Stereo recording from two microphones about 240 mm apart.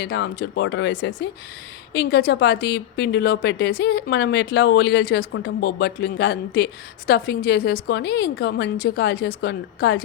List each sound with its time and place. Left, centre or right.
0.0 s a woman's voice: left